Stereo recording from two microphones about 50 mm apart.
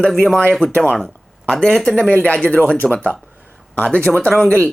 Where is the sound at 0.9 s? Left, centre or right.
Centre.